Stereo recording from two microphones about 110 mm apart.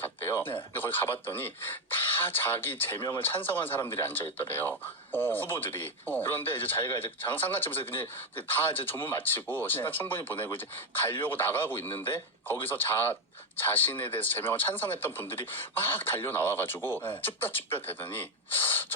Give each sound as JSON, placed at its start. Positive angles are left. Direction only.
{"t": 0.0, "sound": "radio", "side_deg": 20}
{"t": 0.7, "sound": "speech", "side_deg": 20}